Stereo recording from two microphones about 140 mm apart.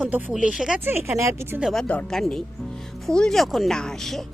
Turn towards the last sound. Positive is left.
turn(degrees=5)  # may be behind; listen again after turning